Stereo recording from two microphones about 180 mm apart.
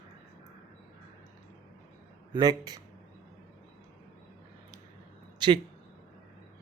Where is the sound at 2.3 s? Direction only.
20° right (ahead or behind).